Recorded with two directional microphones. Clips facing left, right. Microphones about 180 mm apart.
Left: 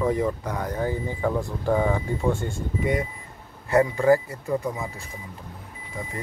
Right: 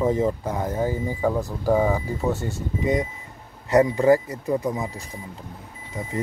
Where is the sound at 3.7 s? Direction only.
20° right (ahead or behind).